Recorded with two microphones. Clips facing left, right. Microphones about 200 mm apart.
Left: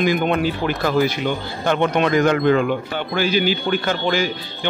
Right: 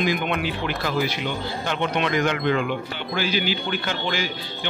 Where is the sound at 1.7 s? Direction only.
50° left (ahead or behind).